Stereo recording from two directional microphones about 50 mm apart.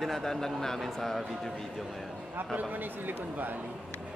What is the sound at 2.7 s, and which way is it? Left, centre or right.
Speech, right.